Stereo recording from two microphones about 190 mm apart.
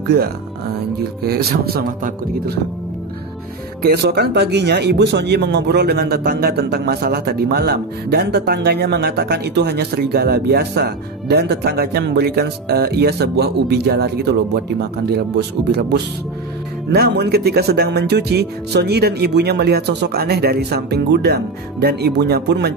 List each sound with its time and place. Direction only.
1.2 s speech: 55° right (ahead or behind)
3.8 s speech: 55° right (ahead or behind)